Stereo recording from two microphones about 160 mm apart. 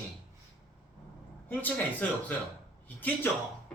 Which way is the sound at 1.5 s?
10° left (ahead or behind).